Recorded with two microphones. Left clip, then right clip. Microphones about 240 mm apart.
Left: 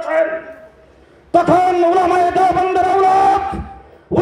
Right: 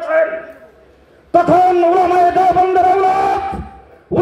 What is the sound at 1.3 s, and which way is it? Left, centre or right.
Speech, left.